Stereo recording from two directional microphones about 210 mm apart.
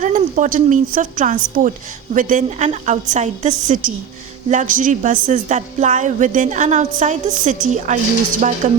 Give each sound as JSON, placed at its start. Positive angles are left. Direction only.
{"t": 0.0, "sound": "a woman's voice", "side_deg": -35}